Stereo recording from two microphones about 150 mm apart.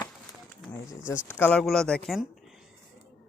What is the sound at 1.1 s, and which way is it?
Speech, 15° left (ahead or behind).